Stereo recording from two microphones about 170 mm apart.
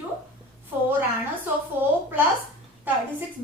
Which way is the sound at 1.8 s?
10° right (ahead or behind).